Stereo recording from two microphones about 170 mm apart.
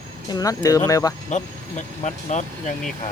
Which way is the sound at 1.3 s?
45° left (ahead or behind).